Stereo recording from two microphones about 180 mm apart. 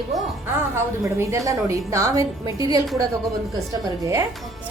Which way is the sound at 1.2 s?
15° right (ahead or behind).